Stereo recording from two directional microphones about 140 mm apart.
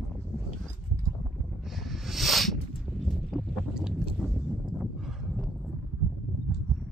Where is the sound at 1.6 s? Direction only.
Centre (ahead or behind).